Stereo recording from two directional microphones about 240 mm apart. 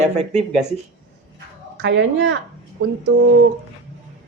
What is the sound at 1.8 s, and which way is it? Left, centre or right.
Speech, right.